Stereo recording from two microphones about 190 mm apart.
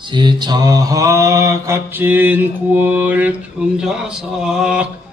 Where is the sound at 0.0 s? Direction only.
25° right (ahead or behind).